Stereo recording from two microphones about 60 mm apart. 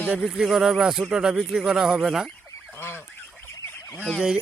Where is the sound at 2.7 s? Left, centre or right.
Left.